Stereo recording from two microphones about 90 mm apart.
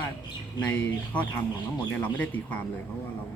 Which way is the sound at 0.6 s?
15° left (ahead or behind).